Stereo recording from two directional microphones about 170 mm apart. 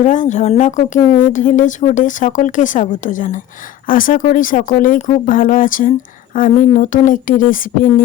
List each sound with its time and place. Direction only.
0.0 s a woman's voice: 45° left (ahead or behind)